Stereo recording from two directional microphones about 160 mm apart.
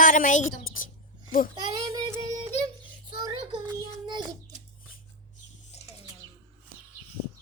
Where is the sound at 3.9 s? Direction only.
25° right (ahead or behind).